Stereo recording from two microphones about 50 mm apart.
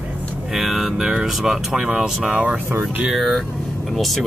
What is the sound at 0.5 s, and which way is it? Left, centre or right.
Speech, centre.